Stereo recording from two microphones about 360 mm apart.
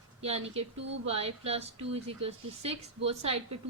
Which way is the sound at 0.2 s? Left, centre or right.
Centre.